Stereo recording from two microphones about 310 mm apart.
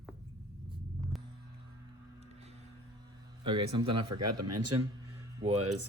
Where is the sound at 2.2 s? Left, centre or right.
Centre.